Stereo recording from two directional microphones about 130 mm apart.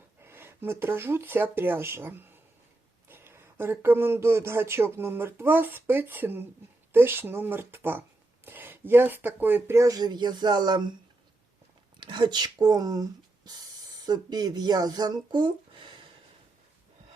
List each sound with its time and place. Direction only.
0.2 s speech: 15° right (ahead or behind); by 10.9 s 35° right (ahead or behind)
11.9 s speech: 35° right (ahead or behind)